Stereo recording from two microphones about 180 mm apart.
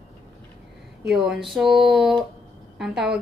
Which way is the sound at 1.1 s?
5° right (ahead or behind).